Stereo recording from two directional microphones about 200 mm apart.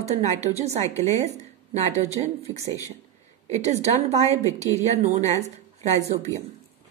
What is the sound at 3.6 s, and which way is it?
A woman's voice, 35° right (ahead or behind).